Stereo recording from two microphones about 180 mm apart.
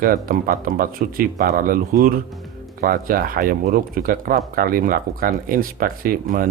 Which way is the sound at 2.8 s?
55° right (ahead or behind).